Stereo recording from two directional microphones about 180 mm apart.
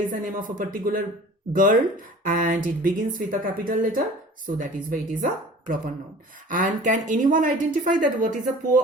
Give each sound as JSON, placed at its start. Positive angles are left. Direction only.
{"t": 0.1, "sound": "speech", "side_deg": -50}